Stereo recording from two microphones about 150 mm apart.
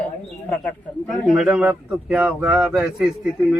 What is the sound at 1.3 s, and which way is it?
Speech, 10° right (ahead or behind).